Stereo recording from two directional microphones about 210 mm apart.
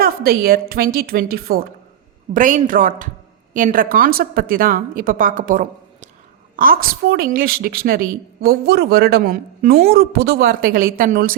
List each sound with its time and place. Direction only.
0.0 s a woman's voice: 45° right (ahead or behind)